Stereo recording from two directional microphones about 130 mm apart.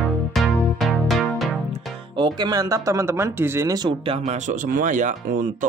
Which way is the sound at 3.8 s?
40° right (ahead or behind).